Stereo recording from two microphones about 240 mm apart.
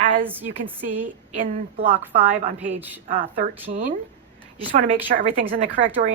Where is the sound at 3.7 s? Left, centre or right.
Right.